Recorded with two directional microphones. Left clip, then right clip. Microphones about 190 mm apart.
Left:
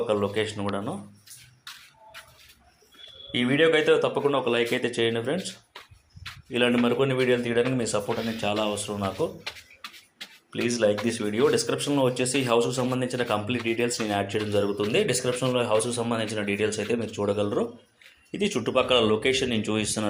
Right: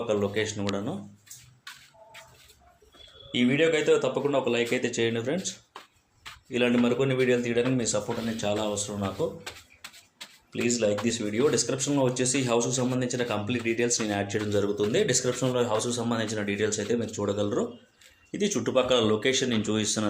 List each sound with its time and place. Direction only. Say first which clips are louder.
0.1 s speech: left 1 dB; 5° right (ahead or behind)
3.3 s speech: left 2 dB; centre (ahead or behind)
6.5 s speech: left 2 dB; centre (ahead or behind)
10.5 s speech: left 2 dB; centre (ahead or behind); by 20.1 s 15° right (ahead or behind)